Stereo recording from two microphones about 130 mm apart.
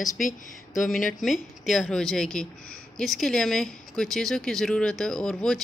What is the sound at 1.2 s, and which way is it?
Speech, centre (ahead or behind).